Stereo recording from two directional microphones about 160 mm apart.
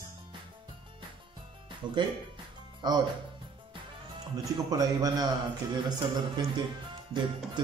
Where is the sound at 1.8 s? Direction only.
30° right (ahead or behind).